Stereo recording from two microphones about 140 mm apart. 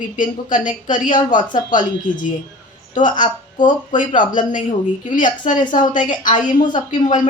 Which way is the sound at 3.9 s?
65° left (ahead or behind).